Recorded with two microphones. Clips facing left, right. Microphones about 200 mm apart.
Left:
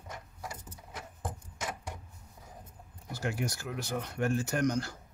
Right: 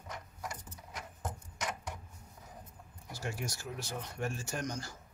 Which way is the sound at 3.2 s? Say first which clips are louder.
Left 5 dB; 60° left (ahead or behind).